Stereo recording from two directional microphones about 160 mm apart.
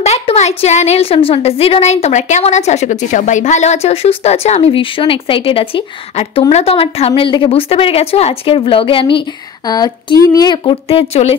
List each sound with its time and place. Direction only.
0.0 s a woman's voice: 40° left (ahead or behind)